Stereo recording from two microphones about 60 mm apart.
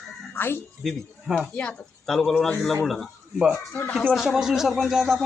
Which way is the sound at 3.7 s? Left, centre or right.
Left.